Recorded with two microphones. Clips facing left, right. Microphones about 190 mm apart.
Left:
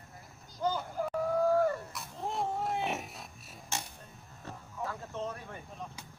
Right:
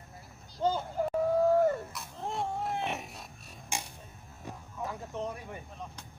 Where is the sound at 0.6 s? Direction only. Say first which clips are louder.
Right 3 dB; 25° right (ahead or behind).